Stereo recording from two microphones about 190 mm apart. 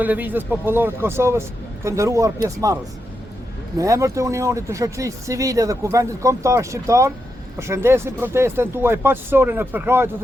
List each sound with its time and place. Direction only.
0.0 s speech: 10° right (ahead or behind)
3.8 s speech: 15° right (ahead or behind)